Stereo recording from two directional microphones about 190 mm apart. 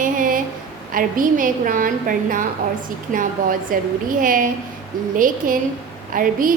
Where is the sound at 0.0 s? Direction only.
45° right (ahead or behind).